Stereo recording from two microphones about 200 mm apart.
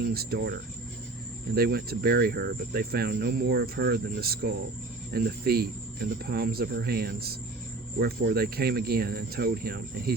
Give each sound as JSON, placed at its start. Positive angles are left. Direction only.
{"t": 0.0, "sound": "speech", "side_deg": -50}
{"t": 1.5, "sound": "speech", "side_deg": -50}